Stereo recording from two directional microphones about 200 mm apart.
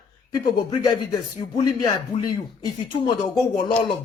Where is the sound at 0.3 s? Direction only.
20° left (ahead or behind).